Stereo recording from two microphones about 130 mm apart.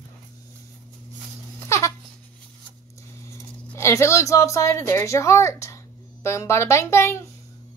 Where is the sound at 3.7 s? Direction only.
20° left (ahead or behind).